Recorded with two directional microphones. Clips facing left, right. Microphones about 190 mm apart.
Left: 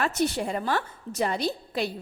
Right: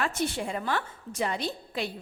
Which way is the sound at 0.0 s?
40° left (ahead or behind).